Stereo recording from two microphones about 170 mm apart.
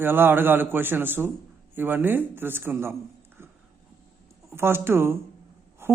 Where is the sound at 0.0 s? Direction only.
10° right (ahead or behind).